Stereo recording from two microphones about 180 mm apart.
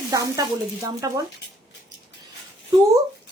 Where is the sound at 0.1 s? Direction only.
20° right (ahead or behind).